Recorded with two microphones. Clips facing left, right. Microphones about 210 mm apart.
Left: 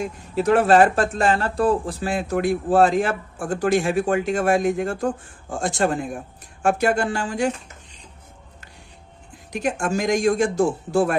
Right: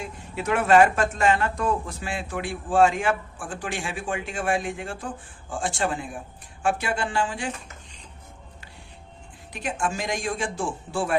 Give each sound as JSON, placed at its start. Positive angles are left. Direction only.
{"t": 0.0, "sound": "a man's voice", "side_deg": 40}
{"t": 9.5, "sound": "a man's voice", "side_deg": 45}